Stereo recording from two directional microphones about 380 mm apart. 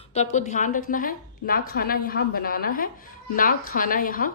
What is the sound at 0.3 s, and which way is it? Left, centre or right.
A woman's voice, centre.